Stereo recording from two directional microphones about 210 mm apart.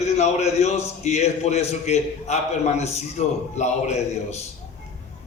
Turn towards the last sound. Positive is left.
turn(degrees=30)  # may be behind; listen again after turning